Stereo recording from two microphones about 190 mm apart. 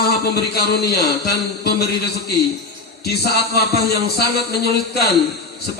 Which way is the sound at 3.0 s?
55° left (ahead or behind).